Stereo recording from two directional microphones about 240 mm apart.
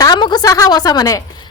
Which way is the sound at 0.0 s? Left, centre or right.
Centre.